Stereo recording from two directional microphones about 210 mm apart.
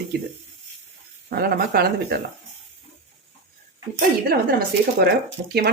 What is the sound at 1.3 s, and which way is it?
Speech, 50° right (ahead or behind).